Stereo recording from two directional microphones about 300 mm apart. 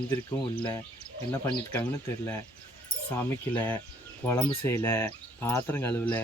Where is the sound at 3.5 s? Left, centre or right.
Centre.